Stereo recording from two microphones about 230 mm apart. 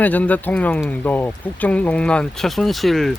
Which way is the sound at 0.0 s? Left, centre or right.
Centre.